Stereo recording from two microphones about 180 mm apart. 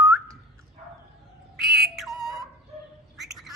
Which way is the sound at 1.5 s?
Centre (ahead or behind).